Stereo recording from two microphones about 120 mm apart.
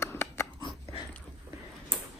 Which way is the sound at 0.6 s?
40° left (ahead or behind).